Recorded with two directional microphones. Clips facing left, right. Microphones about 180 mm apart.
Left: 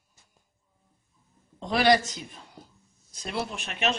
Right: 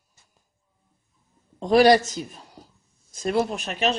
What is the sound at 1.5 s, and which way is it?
A man's voice, 40° right (ahead or behind).